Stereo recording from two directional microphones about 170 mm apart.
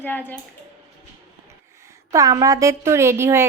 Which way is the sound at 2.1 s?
20° right (ahead or behind).